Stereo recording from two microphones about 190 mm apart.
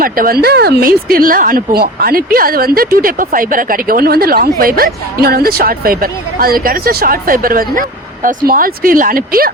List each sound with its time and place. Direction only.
0.0 s speech: 50° right (ahead or behind)